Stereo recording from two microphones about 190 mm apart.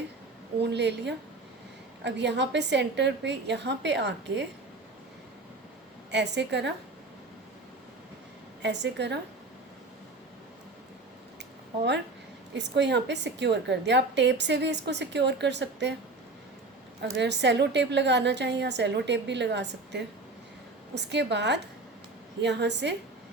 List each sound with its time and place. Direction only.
0.6 s a woman's voice: 65° right (ahead or behind)
6.1 s a woman's voice: 65° right (ahead or behind)
8.6 s a woman's voice: 65° right (ahead or behind)
12.5 s a woman's voice: 65° right (ahead or behind)
17.0 s a woman's voice: 65° right (ahead or behind)